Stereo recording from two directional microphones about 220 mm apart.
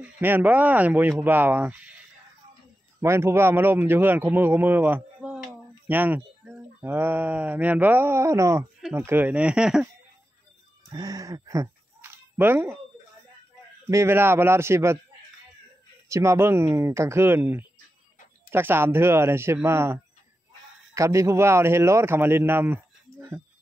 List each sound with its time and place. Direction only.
0.0 s speech: 10° right (ahead or behind)
3.0 s speech: 10° right (ahead or behind)
10.9 s a sound: 20° right (ahead or behind)
13.8 s speech: 10° right (ahead or behind)
16.1 s speech: 10° right (ahead or behind)